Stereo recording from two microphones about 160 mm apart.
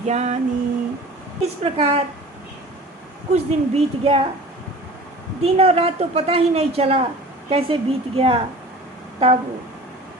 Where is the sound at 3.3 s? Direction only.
40° right (ahead or behind).